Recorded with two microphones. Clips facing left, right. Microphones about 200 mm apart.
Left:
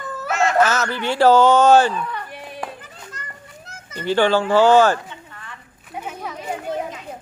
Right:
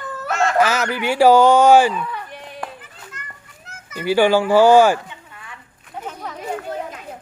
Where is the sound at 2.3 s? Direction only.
5° left (ahead or behind).